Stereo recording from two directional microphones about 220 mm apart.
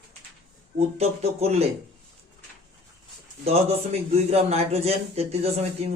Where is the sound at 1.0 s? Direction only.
30° right (ahead or behind).